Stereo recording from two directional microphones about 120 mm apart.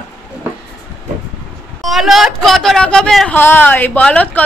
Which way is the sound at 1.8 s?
Centre (ahead or behind).